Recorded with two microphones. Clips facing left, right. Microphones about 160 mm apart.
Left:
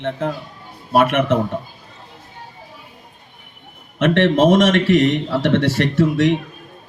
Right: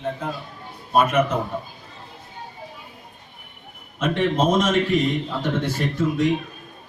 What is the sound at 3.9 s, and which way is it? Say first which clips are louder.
A man's voice: left 6 dB; 80° left.